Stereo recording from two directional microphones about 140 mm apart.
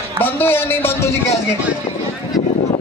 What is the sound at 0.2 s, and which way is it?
Speech, 15° left (ahead or behind).